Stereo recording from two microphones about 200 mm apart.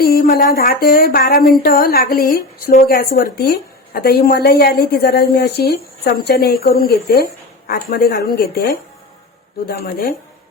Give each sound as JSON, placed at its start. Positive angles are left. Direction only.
{"t": 0.0, "sound": "speech", "side_deg": 50}
{"t": 9.6, "sound": "speech", "side_deg": 50}